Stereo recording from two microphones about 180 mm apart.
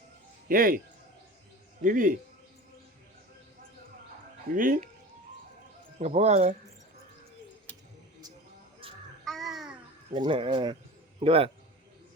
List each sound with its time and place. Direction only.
0.4 s speech: 50° right (ahead or behind)
1.8 s speech: 50° right (ahead or behind)
4.5 s speech: 50° right (ahead or behind)
6.0 s speech: 40° right (ahead or behind)
9.2 s babbling: centre (ahead or behind)
10.2 s speech: 30° right (ahead or behind)